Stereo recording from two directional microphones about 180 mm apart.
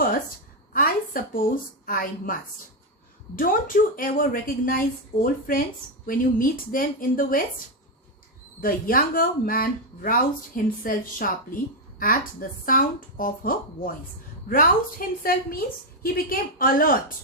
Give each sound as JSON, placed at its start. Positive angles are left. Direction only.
{"t": 0.7, "sound": "a sound", "side_deg": 50}
{"t": 3.3, "sound": "speech", "side_deg": 50}
{"t": 8.6, "sound": "speech", "side_deg": 50}